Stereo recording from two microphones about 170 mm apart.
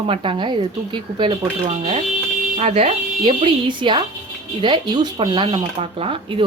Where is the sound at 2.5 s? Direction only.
40° right (ahead or behind).